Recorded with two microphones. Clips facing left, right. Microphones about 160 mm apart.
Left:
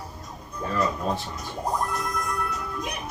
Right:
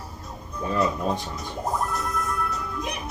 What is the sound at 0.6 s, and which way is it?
Speech, 15° right (ahead or behind).